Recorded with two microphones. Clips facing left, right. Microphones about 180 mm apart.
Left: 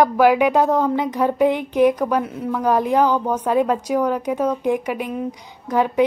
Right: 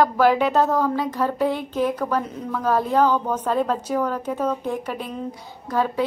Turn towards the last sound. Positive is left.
turn(degrees=15)  # may be behind; listen again after turning